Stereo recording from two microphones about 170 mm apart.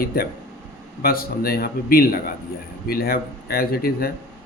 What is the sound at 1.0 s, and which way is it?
Speech, 60° left (ahead or behind).